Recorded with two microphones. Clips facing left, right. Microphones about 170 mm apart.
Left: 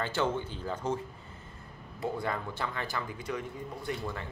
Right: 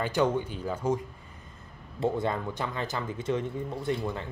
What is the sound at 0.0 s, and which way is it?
Speech, 15° right (ahead or behind).